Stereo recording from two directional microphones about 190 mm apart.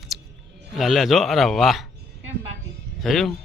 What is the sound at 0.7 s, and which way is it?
A man's voice, centre (ahead or behind).